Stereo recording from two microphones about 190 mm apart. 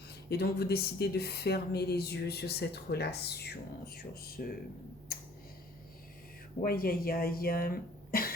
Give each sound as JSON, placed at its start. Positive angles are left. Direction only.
{"t": 0.3, "sound": "speech", "side_deg": 55}
{"t": 6.6, "sound": "speech", "side_deg": 50}